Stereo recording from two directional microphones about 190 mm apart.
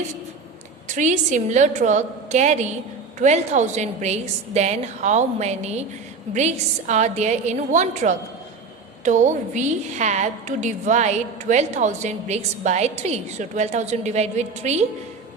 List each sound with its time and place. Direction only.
0.9 s a woman's voice: 40° right (ahead or behind)